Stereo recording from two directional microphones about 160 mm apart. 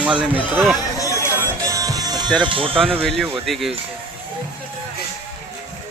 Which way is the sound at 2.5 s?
35° right (ahead or behind).